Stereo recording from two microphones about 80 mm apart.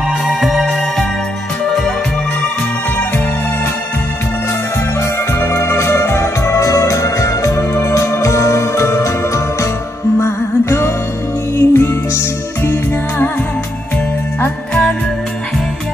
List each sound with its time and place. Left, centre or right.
0.3 s music: centre
5.4 s organ: left
10.2 s music: left
14.7 s music: centre